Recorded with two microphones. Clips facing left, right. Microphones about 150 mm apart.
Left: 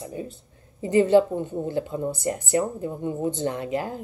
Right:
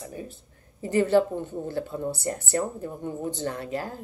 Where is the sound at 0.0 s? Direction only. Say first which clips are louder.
Left 4 dB; 25° left (ahead or behind).